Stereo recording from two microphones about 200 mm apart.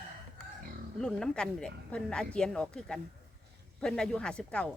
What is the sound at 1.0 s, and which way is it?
Speech, 5° left (ahead or behind).